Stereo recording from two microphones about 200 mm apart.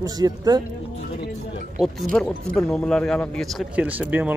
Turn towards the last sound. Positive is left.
turn(degrees=-10)  # may be behind; listen again after turning